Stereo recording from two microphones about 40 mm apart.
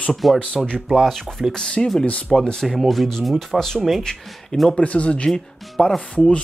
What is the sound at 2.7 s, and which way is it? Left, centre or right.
Speech, centre.